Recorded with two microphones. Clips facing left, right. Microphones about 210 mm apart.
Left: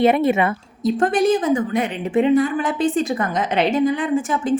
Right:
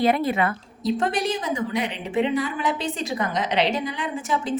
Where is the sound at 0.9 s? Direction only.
50° left (ahead or behind).